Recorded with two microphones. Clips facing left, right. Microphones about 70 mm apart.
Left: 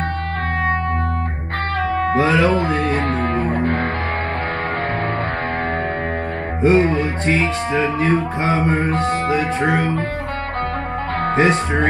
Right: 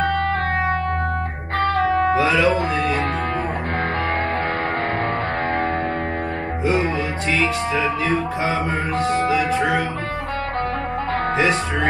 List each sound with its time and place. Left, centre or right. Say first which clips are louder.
2.1 s music: left 2 dB; left
6.6 s music: left 6 dB; left
11.3 s speech: left 5 dB; left